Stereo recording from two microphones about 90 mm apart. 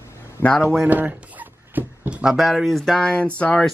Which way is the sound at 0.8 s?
20° right (ahead or behind).